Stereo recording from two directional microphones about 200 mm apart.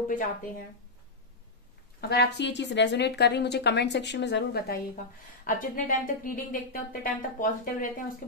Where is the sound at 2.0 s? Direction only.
55° left (ahead or behind).